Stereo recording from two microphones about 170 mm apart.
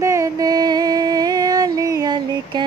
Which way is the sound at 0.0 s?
15° right (ahead or behind).